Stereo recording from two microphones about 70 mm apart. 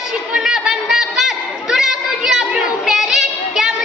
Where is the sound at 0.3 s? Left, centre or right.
Centre.